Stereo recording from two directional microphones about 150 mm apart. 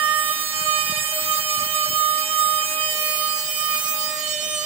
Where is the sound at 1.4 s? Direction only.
40° right (ahead or behind).